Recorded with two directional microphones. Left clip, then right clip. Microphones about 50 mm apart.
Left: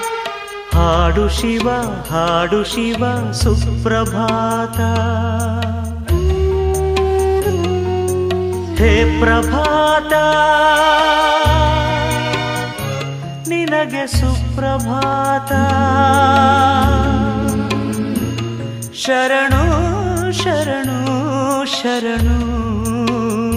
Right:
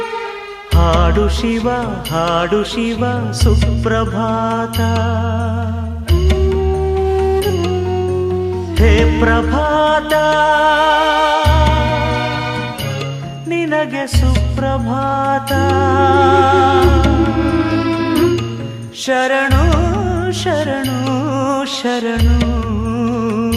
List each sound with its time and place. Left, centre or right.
0.8 s music: right
6.6 s music: right
7.3 s music: centre
14.6 s music: right
19.0 s music: right